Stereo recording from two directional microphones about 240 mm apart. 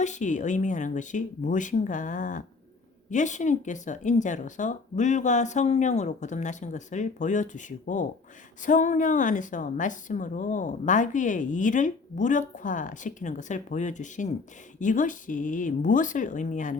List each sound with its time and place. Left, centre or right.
0.0 s a woman's voice: left